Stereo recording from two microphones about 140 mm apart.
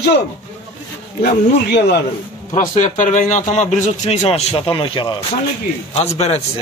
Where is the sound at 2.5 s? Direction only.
60° left (ahead or behind); by 5.1 s 35° left (ahead or behind).